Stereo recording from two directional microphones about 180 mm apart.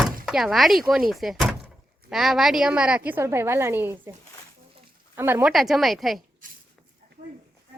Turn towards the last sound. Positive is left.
turn(degrees=0)  # may be behind; listen again after turning